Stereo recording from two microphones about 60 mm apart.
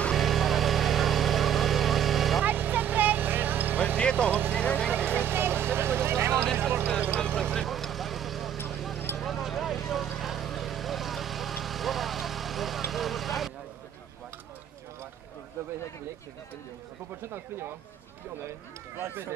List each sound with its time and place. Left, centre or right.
0.1 s vehicle: centre
2.4 s vehicle: right
4.0 s vehicle: centre
4.3 s vehicle: right
4.6 s vehicle: centre
4.9 s vehicle: right
7.3 s vehicle: centre
17.3 s speech: right